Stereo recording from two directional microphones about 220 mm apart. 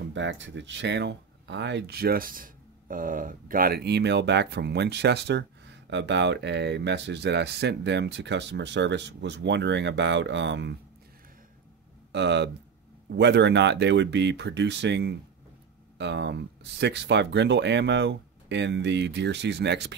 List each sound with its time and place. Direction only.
0.1 s speech: 55° right (ahead or behind)
12.1 s speech: 50° right (ahead or behind)